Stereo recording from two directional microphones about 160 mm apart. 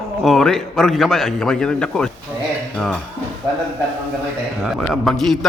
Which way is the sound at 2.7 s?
5° left (ahead or behind).